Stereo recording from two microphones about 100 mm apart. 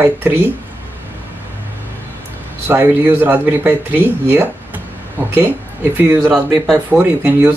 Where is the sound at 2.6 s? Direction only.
20° right (ahead or behind).